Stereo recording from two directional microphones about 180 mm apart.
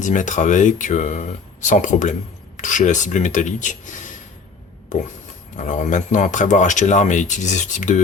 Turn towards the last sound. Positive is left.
turn(degrees=40)  # may be behind; listen again after turning